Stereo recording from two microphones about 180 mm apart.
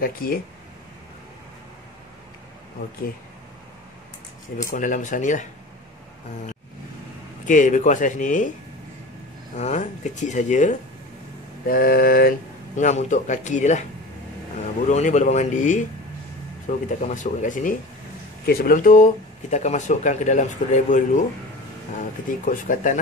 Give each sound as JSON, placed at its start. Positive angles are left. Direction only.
{"t": 0.0, "sound": "speech", "side_deg": 55}
{"t": 4.6, "sound": "speech", "side_deg": 45}
{"t": 7.4, "sound": "speech", "side_deg": 45}
{"t": 9.6, "sound": "speech", "side_deg": 40}
{"t": 11.6, "sound": "speech", "side_deg": 55}
{"t": 14.9, "sound": "speech", "side_deg": 40}
{"t": 18.4, "sound": "a man's voice", "side_deg": 60}